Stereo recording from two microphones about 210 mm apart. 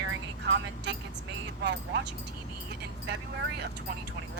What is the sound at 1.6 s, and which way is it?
Speech, 60° right (ahead or behind).